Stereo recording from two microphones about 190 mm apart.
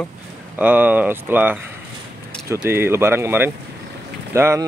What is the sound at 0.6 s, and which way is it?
Speech, 10° right (ahead or behind).